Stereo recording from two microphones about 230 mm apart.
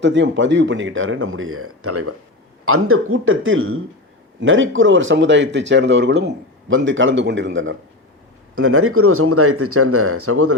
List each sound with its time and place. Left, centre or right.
0.0 s a man's voice: right
2.6 s a man's voice: right
8.5 s speech: right